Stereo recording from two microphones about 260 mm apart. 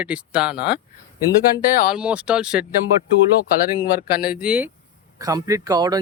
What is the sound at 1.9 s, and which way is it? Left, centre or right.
Speech, centre.